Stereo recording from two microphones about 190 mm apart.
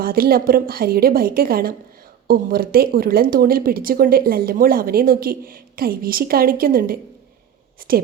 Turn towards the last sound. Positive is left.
turn(degrees=-50)  # may be behind; listen again after turning